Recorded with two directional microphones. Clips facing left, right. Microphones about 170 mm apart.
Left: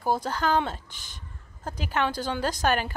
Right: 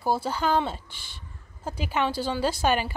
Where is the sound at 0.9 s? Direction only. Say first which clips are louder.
Even; 45° left (ahead or behind).